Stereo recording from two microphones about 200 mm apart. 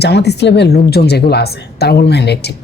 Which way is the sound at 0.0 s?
55° left (ahead or behind).